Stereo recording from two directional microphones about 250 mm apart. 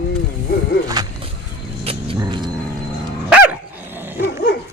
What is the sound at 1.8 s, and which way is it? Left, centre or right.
Vehicle, centre.